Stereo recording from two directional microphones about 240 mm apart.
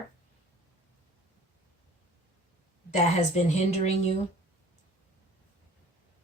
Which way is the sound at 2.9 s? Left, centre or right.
Left.